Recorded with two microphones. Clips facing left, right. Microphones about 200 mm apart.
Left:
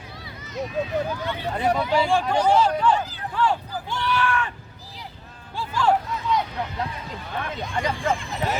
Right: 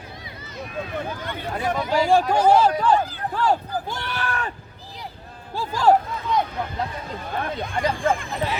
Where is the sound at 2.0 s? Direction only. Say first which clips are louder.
Right 3 dB; 40° right (ahead or behind).